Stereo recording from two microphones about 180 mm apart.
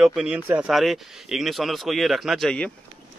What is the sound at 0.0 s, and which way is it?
Speech, 5° right (ahead or behind).